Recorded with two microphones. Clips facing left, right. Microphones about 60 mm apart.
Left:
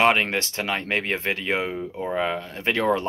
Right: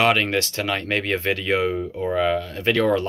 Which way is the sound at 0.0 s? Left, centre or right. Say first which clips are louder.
Right 1 dB; left.